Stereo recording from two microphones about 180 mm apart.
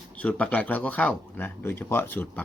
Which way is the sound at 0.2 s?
5° left (ahead or behind).